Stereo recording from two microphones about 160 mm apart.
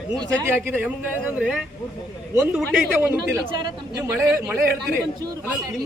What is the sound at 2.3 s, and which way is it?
Speech, 15° right (ahead or behind).